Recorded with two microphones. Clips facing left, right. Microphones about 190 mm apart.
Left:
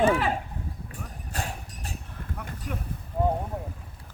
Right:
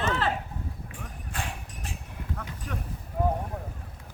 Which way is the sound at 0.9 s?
40° left (ahead or behind).